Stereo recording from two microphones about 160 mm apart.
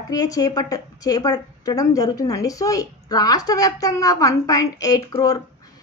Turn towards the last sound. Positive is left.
turn(degrees=25)  # may be behind; listen again after turning